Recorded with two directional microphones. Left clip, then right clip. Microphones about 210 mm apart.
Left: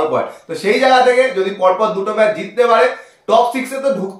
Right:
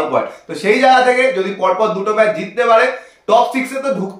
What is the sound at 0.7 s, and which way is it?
Speech, 15° right (ahead or behind).